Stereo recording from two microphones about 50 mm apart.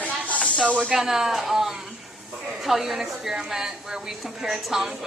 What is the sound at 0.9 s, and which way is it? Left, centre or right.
A woman's voice, centre.